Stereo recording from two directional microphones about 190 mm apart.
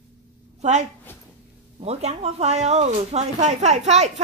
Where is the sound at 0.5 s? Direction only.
35° right (ahead or behind).